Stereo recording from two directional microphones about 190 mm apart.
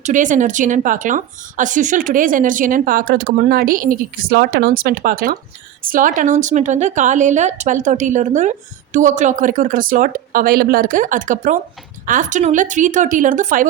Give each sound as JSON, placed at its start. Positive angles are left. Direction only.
{"t": 0.0, "sound": "speech", "side_deg": -40}